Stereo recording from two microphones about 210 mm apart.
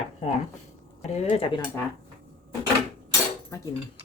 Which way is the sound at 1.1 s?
30° left (ahead or behind).